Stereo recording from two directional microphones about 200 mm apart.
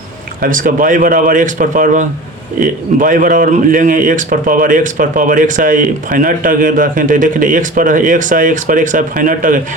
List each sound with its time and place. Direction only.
0.4 s a man's voice: 45° right (ahead or behind)